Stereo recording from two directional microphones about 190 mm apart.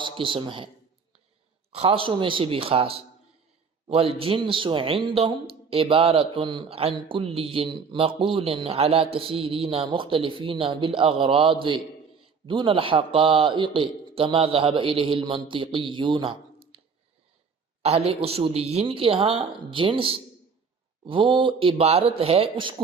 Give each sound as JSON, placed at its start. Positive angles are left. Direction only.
{"t": 0.0, "sound": "a man's voice", "side_deg": -25}
{"t": 1.7, "sound": "a man's voice", "side_deg": -30}
{"t": 17.8, "sound": "a man's voice", "side_deg": -30}